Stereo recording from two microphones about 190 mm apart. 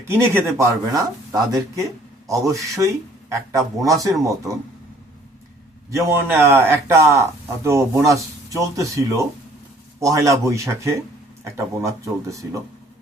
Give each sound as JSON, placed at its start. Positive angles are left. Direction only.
{"t": 0.3, "sound": "a man's voice", "side_deg": -15}
{"t": 5.9, "sound": "a man's voice", "side_deg": -15}